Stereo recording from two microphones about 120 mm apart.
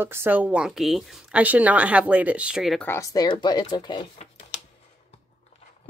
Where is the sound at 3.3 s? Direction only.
40° left (ahead or behind).